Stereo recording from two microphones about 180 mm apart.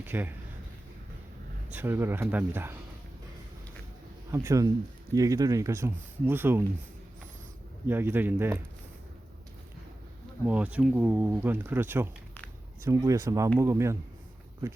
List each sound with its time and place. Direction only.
0.0 s speech: 10° right (ahead or behind)
1.7 s speech: 10° right (ahead or behind)
4.3 s speech: 15° right (ahead or behind)
7.9 s speech: 10° right (ahead or behind)
10.4 s speech: 10° right (ahead or behind)